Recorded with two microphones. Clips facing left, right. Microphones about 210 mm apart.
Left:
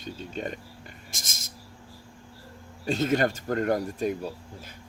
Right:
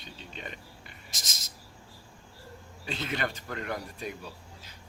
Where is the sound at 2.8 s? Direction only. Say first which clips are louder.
Left 9 dB; 45° left (ahead or behind).